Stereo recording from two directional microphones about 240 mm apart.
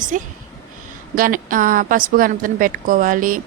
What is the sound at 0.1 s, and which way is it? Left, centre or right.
A woman's voice, right.